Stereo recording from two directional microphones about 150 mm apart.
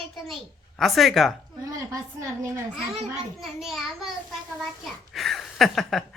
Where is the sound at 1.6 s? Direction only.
20° right (ahead or behind).